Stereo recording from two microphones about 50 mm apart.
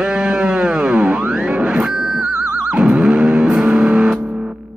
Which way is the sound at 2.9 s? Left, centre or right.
Centre.